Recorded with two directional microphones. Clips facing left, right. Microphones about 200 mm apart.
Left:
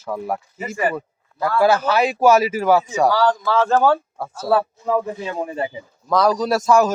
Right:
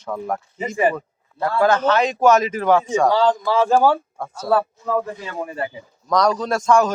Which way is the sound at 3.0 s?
20° right (ahead or behind).